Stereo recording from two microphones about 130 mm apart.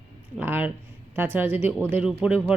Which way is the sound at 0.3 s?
15° right (ahead or behind).